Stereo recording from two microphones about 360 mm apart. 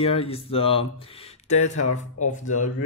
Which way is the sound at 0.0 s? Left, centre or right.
Centre.